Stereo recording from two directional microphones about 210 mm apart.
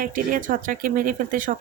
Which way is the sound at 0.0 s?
40° right (ahead or behind).